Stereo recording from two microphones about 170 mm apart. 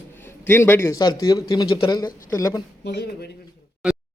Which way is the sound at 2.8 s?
80° left.